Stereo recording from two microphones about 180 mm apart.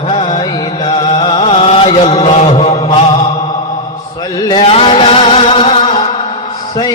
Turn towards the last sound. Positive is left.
turn(degrees=30)  # may be behind; listen again after turning